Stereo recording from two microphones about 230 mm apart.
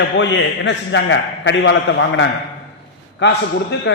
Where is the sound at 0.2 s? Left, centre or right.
Left.